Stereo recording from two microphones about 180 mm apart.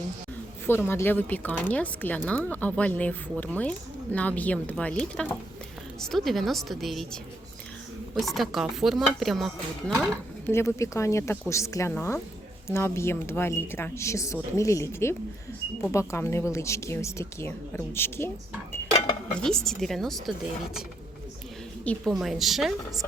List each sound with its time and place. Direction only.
0.7 s speech: 10° left (ahead or behind)
8.2 s speech: centre (ahead or behind)
10.5 s speech: 15° left (ahead or behind)
19.3 s speech: 5° left (ahead or behind)
21.8 s speech: centre (ahead or behind)